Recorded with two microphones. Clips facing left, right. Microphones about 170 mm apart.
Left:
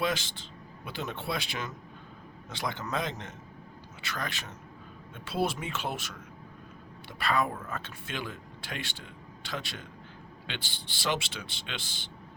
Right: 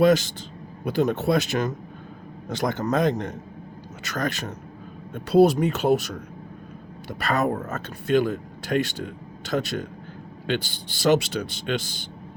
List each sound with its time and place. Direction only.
0.0 s speech: 45° right (ahead or behind)